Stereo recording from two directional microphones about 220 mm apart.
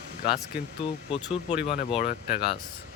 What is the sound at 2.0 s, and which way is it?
Speech, 45° left (ahead or behind).